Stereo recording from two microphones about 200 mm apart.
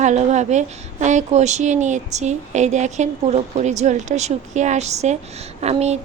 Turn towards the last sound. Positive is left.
turn(degrees=-35)  # may be behind; listen again after turning